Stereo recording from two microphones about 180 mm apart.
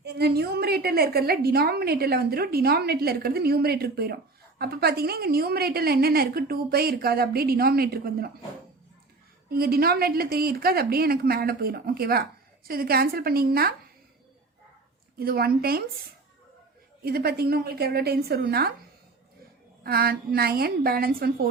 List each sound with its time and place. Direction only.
0.0 s a woman's voice: 65° right (ahead or behind)
9.5 s a woman's voice: 55° right (ahead or behind)
15.2 s a woman's voice: 55° right (ahead or behind)
17.0 s a woman's voice: 60° right (ahead or behind)
19.8 s a woman's voice: 60° right (ahead or behind)